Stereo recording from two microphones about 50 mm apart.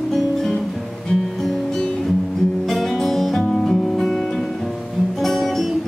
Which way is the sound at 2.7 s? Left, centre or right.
Centre.